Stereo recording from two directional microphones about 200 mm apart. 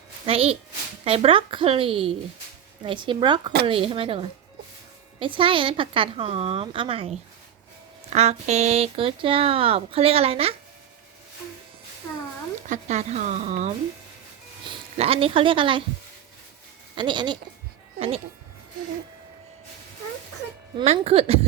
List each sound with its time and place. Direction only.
0.3 s speech: 30° right (ahead or behind)
12.6 s speech: 35° right (ahead or behind)
16.9 s speech: 25° right (ahead or behind)
20.7 s speech: 30° right (ahead or behind)